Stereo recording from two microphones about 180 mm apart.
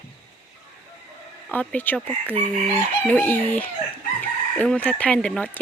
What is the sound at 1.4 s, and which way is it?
Speech, 5° left (ahead or behind).